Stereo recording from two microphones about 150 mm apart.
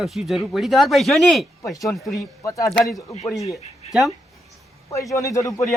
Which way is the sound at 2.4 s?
20° left (ahead or behind).